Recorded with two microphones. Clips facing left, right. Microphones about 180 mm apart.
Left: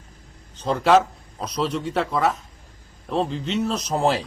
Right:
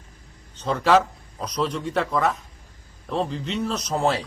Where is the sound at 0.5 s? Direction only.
35° left (ahead or behind).